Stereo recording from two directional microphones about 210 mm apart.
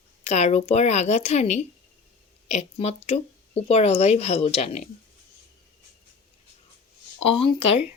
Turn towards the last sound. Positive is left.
turn(degrees=25)  # may be behind; listen again after turning